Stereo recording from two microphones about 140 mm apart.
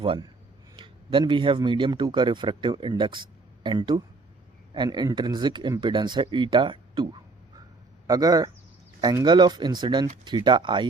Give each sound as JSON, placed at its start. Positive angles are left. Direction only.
{"t": 0.0, "sound": "a man's voice", "side_deg": -40}